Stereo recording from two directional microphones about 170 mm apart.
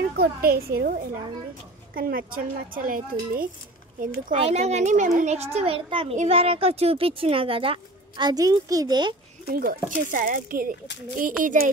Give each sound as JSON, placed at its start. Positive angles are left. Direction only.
{"t": 0.1, "sound": "speech", "side_deg": -65}
{"t": 4.4, "sound": "speech", "side_deg": -40}
{"t": 9.5, "sound": "speech", "side_deg": -60}
{"t": 11.4, "sound": "a sound", "side_deg": -50}